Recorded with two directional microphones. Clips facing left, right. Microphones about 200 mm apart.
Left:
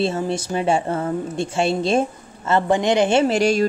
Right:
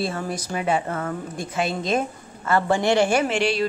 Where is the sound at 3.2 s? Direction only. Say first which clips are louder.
Left 5 dB; 40° left (ahead or behind).